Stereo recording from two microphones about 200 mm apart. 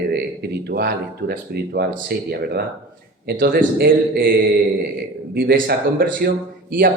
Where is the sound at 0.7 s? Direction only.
50° right (ahead or behind).